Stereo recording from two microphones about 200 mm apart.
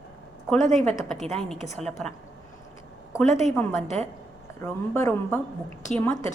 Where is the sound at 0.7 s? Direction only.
Centre (ahead or behind).